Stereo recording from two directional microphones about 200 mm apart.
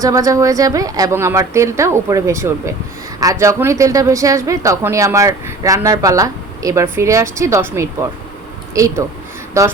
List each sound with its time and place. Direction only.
0.0 s speech: 15° right (ahead or behind)